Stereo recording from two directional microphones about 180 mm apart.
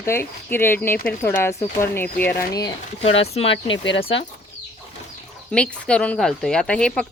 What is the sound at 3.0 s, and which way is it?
Speech, 35° left (ahead or behind).